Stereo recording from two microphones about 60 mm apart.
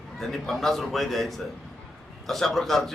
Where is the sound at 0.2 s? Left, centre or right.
Centre.